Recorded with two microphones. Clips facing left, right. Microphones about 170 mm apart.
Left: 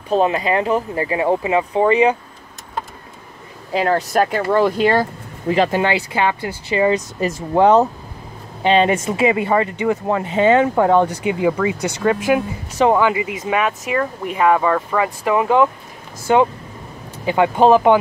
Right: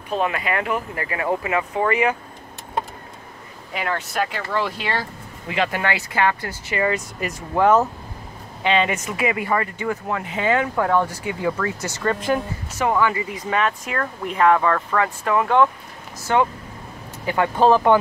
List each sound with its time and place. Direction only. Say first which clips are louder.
0.1 s speech: left 6 dB; 30° left (ahead or behind)
3.7 s speech: left 8 dB; 35° left (ahead or behind)
5.8 s speech: left 4 dB; 25° left (ahead or behind)
8.6 s speech: left 6 dB; 35° left (ahead or behind); by 17.9 s 15° left (ahead or behind)